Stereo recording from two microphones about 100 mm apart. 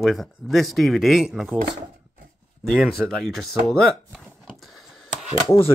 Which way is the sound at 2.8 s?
Centre (ahead or behind).